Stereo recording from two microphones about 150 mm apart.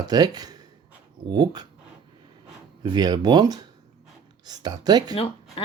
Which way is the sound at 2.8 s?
30° right (ahead or behind).